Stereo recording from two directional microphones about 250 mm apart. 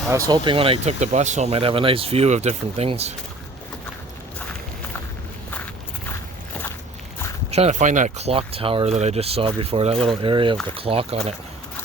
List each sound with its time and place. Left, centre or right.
0.3 s speech: centre
7.5 s speech: right